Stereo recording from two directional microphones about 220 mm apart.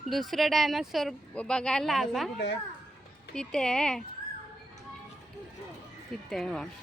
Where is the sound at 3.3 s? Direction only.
5° left (ahead or behind).